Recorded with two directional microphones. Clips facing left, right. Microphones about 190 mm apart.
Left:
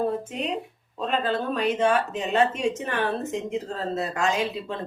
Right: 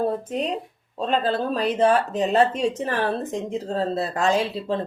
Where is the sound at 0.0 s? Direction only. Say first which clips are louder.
Right 2 dB; 35° right (ahead or behind).